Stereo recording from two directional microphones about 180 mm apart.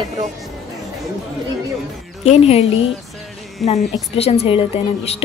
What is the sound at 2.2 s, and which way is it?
Speech, 35° left (ahead or behind).